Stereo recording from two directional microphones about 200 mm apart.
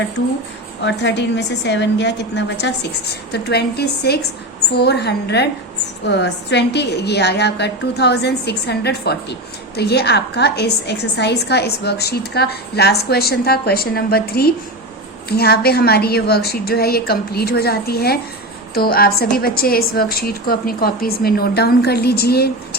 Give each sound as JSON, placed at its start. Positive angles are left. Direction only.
{"t": 0.9, "sound": "a woman's voice", "side_deg": 60}